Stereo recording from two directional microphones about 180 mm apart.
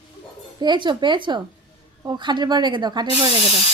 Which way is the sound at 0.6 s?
25° right (ahead or behind).